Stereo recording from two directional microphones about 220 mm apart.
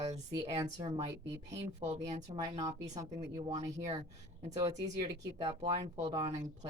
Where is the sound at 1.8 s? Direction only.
30° right (ahead or behind).